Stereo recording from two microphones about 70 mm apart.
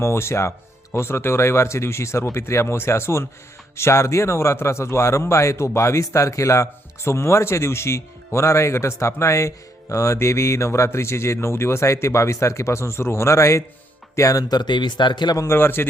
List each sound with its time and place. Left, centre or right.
0.0 s a man's voice: left
15.4 s speech: left